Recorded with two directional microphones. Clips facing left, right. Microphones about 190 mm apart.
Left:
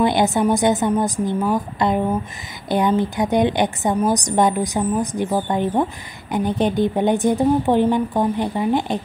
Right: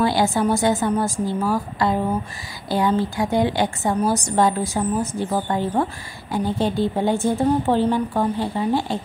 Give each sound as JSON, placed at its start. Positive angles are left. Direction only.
{"t": 0.0, "sound": "a woman's voice", "side_deg": 20}